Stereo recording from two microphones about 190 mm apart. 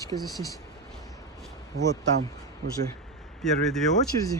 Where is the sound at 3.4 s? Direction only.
Centre (ahead or behind).